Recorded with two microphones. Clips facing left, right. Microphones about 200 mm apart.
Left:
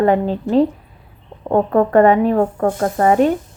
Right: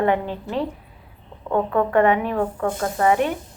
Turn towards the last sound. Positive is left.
turn(degrees=40)  # may be behind; listen again after turning